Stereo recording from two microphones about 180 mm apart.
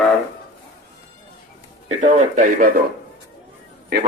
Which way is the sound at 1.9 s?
40° right (ahead or behind).